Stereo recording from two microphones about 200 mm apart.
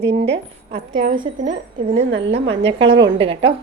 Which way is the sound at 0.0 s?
65° right (ahead or behind).